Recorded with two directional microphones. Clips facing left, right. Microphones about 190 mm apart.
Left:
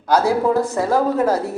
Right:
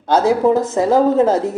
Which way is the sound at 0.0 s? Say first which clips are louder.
Right 3 dB; 25° right (ahead or behind).